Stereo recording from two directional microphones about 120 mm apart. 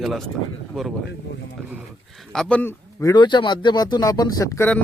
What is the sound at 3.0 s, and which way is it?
Speech, 35° left (ahead or behind).